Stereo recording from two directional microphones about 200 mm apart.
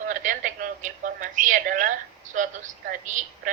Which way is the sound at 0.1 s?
40° right (ahead or behind).